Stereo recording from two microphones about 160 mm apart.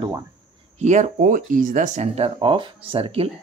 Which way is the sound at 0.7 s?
45° right (ahead or behind).